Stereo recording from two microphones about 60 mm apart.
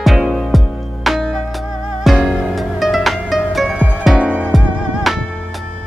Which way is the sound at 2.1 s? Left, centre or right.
Centre.